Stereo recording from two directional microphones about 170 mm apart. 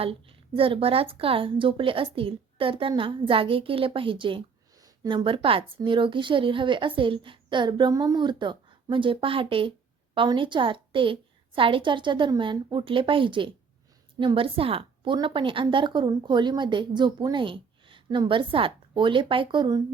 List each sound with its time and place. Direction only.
0.0 s a woman's voice: 30° right (ahead or behind)